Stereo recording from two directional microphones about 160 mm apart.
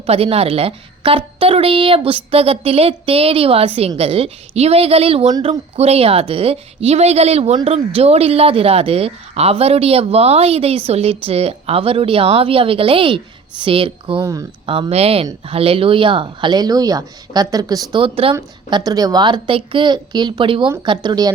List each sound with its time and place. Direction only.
0.0 s a woman's voice: 40° right (ahead or behind)